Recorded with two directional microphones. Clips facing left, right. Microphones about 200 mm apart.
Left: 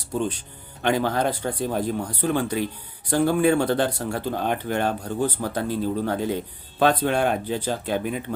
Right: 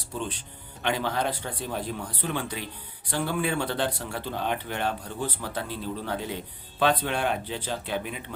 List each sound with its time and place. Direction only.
0.1 s speech: 45° left (ahead or behind)